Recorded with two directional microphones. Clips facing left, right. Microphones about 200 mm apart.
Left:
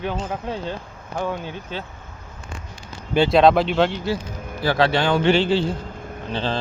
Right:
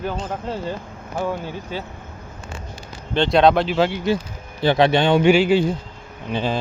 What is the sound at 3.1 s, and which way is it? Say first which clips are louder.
Speech: left 1 dB; 5° left (ahead or behind).